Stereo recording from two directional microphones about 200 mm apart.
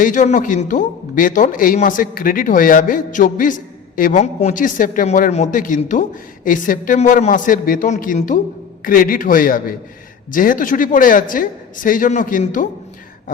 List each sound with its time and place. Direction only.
0.0 s a man's voice: 40° left (ahead or behind)